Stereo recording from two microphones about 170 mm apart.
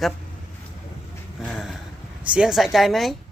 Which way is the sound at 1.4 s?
Centre (ahead or behind).